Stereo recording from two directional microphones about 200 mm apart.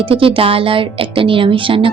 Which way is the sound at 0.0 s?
25° right (ahead or behind).